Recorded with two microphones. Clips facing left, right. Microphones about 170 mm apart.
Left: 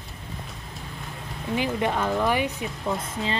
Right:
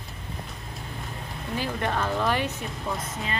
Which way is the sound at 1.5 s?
15° left (ahead or behind).